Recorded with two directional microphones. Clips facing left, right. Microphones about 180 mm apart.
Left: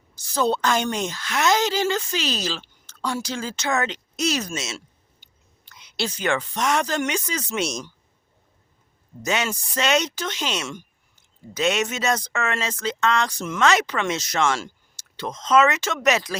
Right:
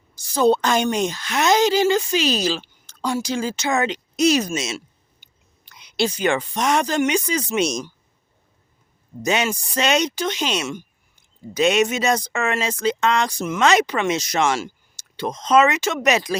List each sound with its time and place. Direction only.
0.2 s a woman's voice: 15° right (ahead or behind)
9.2 s a woman's voice: 15° right (ahead or behind)